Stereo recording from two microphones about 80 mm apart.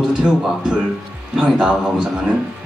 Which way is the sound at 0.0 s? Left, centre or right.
Centre.